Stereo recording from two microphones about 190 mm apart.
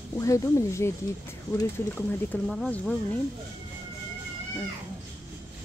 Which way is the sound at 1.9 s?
10° left (ahead or behind).